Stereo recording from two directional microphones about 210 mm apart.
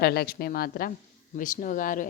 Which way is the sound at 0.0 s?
50° left (ahead or behind).